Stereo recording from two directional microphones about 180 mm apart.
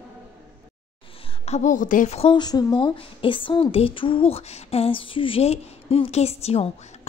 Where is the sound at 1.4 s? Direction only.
40° left (ahead or behind).